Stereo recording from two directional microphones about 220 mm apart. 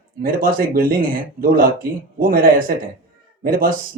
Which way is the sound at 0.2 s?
40° right (ahead or behind).